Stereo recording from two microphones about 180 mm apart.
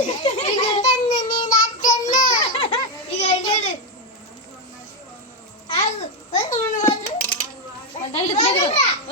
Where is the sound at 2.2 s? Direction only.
25° left (ahead or behind).